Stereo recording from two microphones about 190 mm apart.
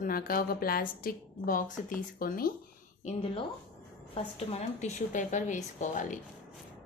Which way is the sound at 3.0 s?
30° left (ahead or behind).